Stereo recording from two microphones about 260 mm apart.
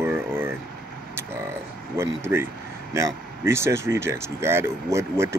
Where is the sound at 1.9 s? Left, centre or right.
Centre.